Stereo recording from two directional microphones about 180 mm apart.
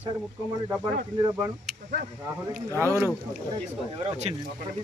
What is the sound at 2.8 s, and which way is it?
Speech, 15° right (ahead or behind).